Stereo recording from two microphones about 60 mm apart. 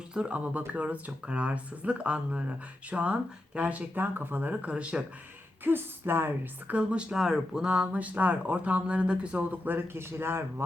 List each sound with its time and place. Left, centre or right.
0.1 s speech: right
5.6 s a woman's voice: right
6.7 s speech: centre; by 10.4 s right